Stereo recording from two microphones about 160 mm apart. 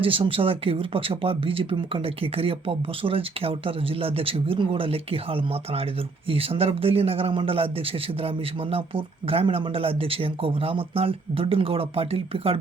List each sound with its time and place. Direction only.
0.0 s speech: 35° right (ahead or behind)
8.7 s speech: 35° right (ahead or behind)